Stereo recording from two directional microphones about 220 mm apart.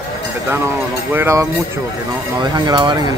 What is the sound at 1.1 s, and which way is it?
Speech, 10° right (ahead or behind).